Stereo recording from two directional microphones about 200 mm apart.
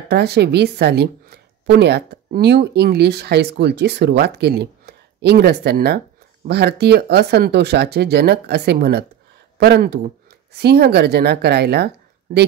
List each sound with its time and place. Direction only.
0.1 s speech: 55° right (ahead or behind)